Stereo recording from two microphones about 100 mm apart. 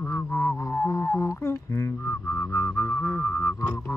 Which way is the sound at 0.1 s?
25° left (ahead or behind).